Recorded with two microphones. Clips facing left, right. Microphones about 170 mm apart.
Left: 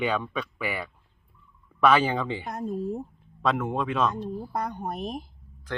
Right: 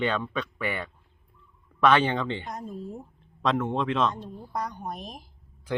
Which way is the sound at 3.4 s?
10° left (ahead or behind).